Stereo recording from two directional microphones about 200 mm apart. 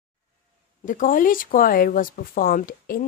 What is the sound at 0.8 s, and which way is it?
Speech, 40° left (ahead or behind).